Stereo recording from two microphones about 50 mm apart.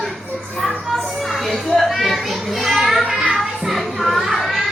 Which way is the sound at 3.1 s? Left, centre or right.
Centre.